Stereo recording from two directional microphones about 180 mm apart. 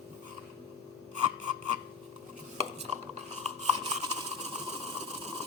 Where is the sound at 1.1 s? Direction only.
40° right (ahead or behind).